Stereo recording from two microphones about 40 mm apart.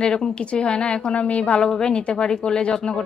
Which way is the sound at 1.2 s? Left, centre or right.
Left.